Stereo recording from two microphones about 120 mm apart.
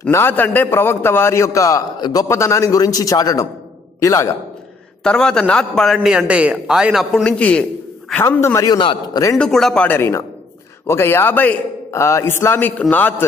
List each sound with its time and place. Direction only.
0.1 s a man's voice: 20° left (ahead or behind); by 2.2 s 35° left (ahead or behind)
2.2 s a man's voice: 25° left (ahead or behind)
5.0 s a man's voice: 5° left (ahead or behind)
6.0 s speech: 10° right (ahead or behind)
7.1 s a man's voice: 10° left (ahead or behind); by 8.7 s 25° left (ahead or behind)
8.7 s a man's voice: 40° left (ahead or behind)
9.4 s speech: 5° left (ahead or behind)
9.8 s a man's voice: 20° left (ahead or behind)